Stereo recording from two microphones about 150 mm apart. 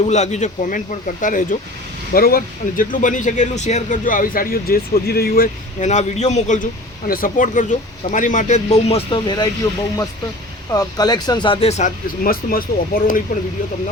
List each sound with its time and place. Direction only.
0.0 s speech: 50° left (ahead or behind)
2.1 s speech: 75° left (ahead or behind)
5.8 s speech: 50° left (ahead or behind)
7.1 s speech: 65° left (ahead or behind); by 9.5 s 30° left (ahead or behind)
10.7 s speech: 25° left (ahead or behind)
12.2 s speech: 75° left (ahead or behind)